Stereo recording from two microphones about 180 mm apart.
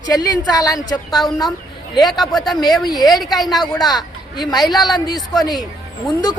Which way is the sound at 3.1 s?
Centre (ahead or behind).